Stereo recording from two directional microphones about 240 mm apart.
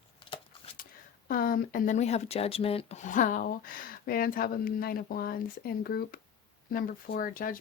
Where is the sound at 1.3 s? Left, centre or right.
Left.